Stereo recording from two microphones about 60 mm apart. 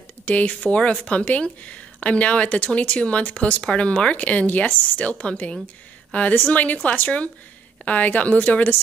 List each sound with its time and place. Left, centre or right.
0.2 s speech: left